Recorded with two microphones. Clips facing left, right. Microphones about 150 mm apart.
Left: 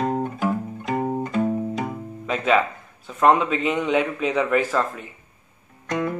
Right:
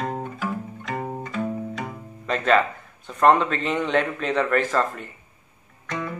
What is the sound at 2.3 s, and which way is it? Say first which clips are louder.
A man's voice: even; 5° left (ahead or behind).